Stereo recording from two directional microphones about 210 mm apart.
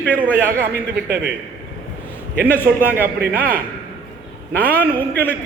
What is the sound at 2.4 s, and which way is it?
Speech, 10° left (ahead or behind).